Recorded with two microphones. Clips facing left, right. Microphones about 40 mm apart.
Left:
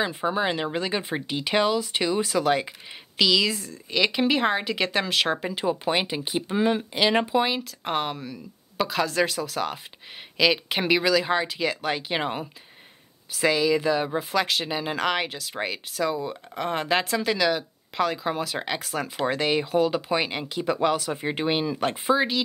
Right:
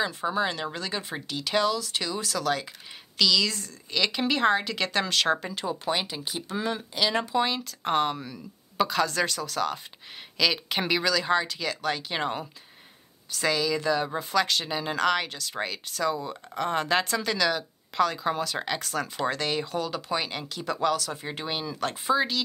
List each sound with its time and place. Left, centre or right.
0.0 s speech: centre